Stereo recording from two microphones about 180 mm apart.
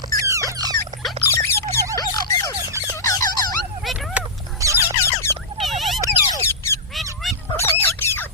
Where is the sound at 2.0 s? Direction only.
20° left (ahead or behind).